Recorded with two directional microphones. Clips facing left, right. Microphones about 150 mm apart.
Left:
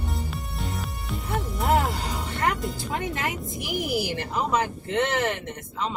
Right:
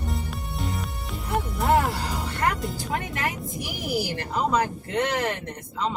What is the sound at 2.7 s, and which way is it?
Speech, 20° left (ahead or behind).